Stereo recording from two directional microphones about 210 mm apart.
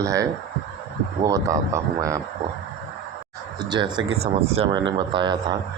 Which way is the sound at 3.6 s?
20° right (ahead or behind).